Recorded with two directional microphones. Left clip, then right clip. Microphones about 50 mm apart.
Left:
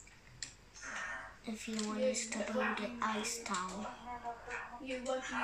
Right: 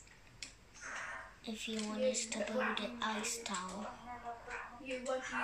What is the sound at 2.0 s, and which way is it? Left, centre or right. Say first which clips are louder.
Speech: right 1 dB; right.